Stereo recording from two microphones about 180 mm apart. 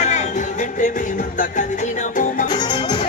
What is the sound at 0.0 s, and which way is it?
Music, 40° left (ahead or behind).